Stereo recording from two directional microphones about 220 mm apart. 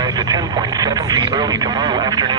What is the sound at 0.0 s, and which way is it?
Speech, 20° right (ahead or behind).